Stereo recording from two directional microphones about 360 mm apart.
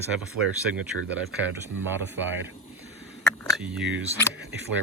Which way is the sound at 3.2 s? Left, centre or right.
Centre.